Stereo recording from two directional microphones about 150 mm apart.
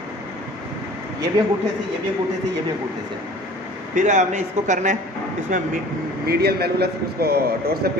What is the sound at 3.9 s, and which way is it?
Speech, 55° right (ahead or behind).